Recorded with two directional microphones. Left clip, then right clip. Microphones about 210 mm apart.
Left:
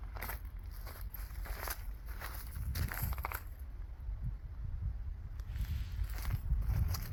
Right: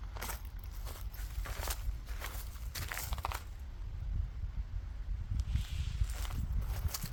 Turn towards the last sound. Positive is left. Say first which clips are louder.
# right 2 dB
turn(degrees=0)  # may be behind; listen again after turning